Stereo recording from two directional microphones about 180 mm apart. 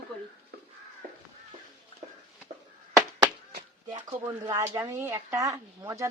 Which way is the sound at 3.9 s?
20° right (ahead or behind).